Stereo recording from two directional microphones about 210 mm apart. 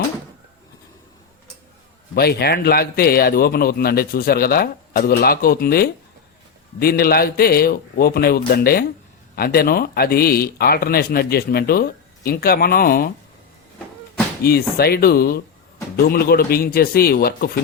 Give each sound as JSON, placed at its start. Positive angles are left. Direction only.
{"t": 2.1, "sound": "a man's voice", "side_deg": 50}
{"t": 14.4, "sound": "a man's voice", "side_deg": 45}